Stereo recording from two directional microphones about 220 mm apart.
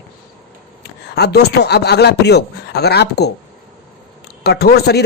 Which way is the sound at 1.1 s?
50° left (ahead or behind).